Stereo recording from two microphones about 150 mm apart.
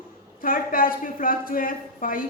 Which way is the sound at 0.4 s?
70° left (ahead or behind).